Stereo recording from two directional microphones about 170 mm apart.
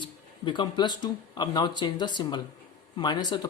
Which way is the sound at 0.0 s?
25° left (ahead or behind).